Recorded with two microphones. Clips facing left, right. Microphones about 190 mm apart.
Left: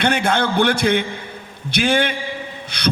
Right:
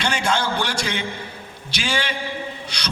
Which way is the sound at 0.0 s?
55° left (ahead or behind).